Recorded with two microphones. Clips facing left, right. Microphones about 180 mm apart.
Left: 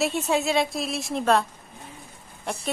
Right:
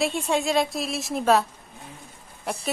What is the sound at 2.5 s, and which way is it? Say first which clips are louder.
Speech: right 1 dB; 5° right (ahead or behind).